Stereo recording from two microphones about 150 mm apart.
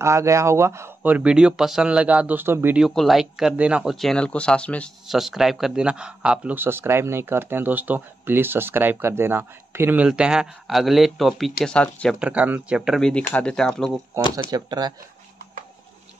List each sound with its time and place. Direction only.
0.0 s speech: 20° right (ahead or behind)
2.9 s speech: centre (ahead or behind)
12.2 s speech: 10° right (ahead or behind)
14.5 s speech: 25° right (ahead or behind)